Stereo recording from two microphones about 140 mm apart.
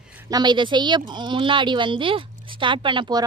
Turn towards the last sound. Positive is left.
turn(degrees=-30)  # may be behind; listen again after turning